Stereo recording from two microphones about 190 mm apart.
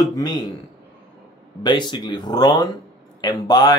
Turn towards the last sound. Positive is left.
turn(degrees=20)  # may be behind; listen again after turning